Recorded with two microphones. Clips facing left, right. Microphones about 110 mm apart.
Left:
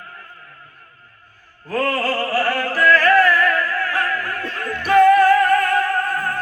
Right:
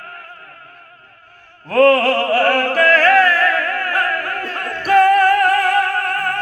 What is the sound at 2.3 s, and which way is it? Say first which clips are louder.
Music: right 5 dB; 60° right (ahead or behind).